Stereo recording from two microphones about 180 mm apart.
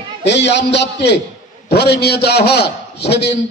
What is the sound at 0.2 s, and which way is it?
A man's voice, 75° left (ahead or behind).